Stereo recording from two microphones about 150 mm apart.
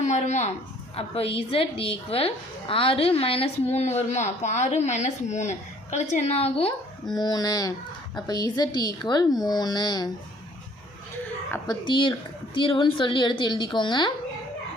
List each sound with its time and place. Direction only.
0.1 s a woman's voice: 50° left (ahead or behind)
7.1 s a woman's voice: 25° left (ahead or behind)
11.5 s a woman's voice: 25° left (ahead or behind)